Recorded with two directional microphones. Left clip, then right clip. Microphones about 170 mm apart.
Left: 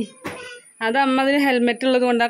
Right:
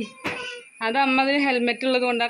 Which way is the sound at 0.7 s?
40° left (ahead or behind).